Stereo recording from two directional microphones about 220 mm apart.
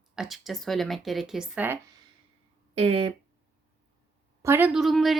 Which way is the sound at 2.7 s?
25° right (ahead or behind).